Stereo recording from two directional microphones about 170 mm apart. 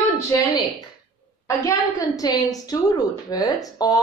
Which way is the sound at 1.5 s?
20° left (ahead or behind).